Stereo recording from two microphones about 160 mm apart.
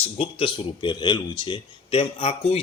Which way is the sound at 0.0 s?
35° left (ahead or behind).